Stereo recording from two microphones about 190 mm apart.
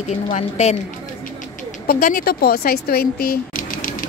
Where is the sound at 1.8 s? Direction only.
50° left (ahead or behind).